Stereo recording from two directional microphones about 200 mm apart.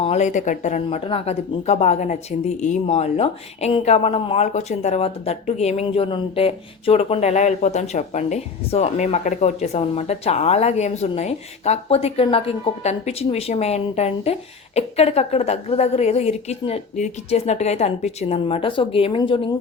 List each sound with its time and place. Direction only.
0.0 s speech: 35° left (ahead or behind)